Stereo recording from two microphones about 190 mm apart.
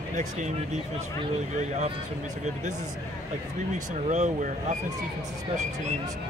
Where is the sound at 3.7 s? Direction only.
40° right (ahead or behind).